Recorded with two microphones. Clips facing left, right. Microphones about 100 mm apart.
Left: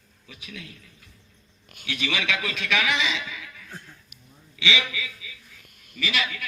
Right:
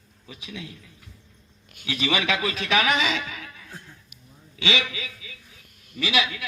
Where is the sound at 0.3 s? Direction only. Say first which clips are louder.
Right 3 dB; 25° right (ahead or behind).